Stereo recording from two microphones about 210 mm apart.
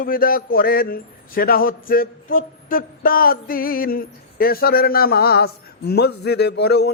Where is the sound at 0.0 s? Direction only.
45° left (ahead or behind).